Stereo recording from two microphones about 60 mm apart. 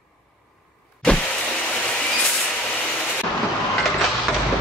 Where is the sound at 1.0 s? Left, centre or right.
Centre.